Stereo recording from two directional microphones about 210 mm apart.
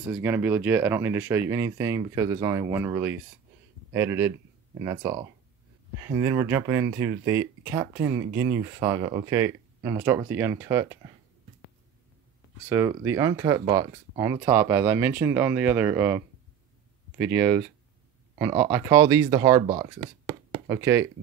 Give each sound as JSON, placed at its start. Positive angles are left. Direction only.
{"t": 0.1, "sound": "speech", "side_deg": -10}
{"t": 12.6, "sound": "speech", "side_deg": -15}
{"t": 20.0, "sound": "a sound", "side_deg": -25}
{"t": 20.6, "sound": "speech", "side_deg": -10}